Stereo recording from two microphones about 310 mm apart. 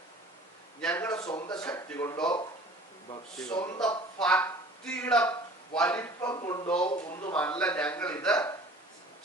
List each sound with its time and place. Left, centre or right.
0.8 s a man's voice: centre